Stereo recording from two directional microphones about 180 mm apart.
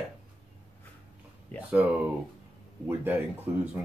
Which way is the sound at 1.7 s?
10° right (ahead or behind).